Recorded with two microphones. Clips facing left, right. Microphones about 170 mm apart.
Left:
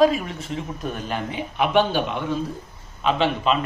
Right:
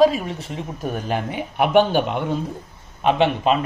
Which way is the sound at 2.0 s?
55° right (ahead or behind).